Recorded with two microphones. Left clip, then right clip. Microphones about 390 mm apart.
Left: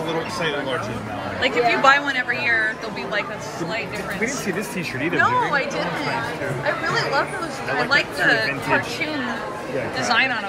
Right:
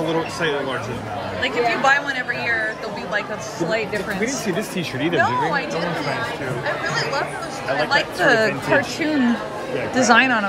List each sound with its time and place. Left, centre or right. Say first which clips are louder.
1.4 s speech: left 2 dB; centre
5.1 s speech: left 1 dB; centre
6.6 s speech: left 1 dB; centre
9.9 s speech: right 5 dB; centre